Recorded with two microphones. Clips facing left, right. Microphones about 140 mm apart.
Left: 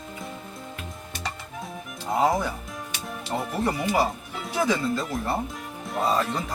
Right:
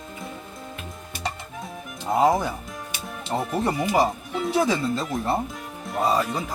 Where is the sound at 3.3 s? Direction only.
25° right (ahead or behind).